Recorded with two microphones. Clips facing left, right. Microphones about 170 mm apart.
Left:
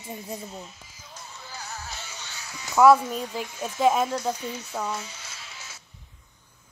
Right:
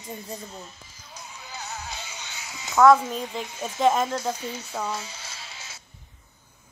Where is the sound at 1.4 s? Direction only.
20° right (ahead or behind).